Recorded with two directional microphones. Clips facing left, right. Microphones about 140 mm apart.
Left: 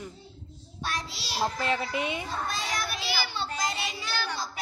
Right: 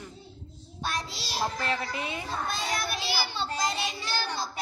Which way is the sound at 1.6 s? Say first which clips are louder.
Left 2 dB; 15° left (ahead or behind).